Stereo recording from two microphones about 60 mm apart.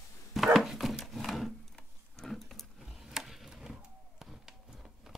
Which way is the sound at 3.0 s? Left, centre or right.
Centre.